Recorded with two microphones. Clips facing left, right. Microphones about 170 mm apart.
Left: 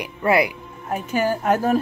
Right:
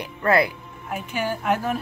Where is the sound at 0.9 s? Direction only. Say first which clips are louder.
Left 5 dB; 40° left (ahead or behind).